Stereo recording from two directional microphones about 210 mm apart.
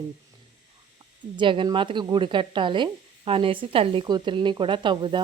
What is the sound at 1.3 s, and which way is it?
Speech, 25° right (ahead or behind).